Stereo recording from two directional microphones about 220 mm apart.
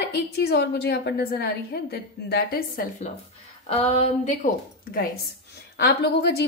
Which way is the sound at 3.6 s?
25° left (ahead or behind).